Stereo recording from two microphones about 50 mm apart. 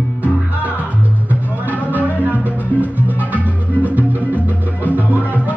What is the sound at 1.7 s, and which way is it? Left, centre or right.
Music, right.